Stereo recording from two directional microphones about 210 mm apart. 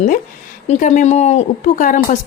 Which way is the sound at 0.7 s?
35° left (ahead or behind).